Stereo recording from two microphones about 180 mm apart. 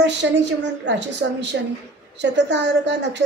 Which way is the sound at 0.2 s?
85° right.